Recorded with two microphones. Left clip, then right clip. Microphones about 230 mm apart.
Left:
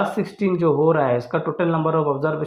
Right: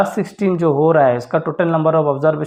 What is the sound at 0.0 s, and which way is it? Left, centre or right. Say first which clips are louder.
Speech: right 5 dB; right.